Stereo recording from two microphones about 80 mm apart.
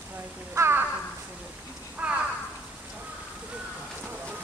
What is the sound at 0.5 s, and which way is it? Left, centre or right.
Speech, right.